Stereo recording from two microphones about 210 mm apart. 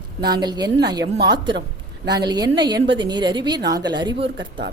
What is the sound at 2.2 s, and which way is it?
A woman's voice, 20° right (ahead or behind).